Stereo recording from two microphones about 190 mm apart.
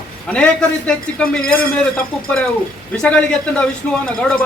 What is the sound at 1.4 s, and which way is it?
Speech, 50° left (ahead or behind).